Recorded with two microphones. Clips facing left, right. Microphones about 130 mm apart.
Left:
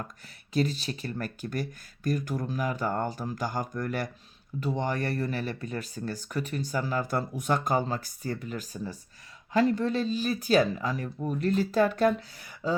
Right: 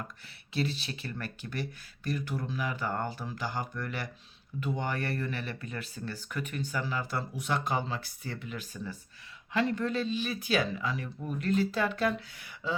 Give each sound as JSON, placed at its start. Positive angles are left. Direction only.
{"t": 0.5, "sound": "speech", "side_deg": 40}